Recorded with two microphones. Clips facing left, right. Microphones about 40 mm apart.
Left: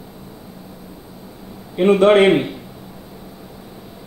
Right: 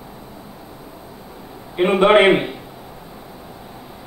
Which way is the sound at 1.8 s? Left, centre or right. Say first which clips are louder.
Left 1 dB; centre.